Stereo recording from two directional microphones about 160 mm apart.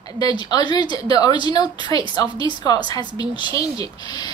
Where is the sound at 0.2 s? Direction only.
25° left (ahead or behind).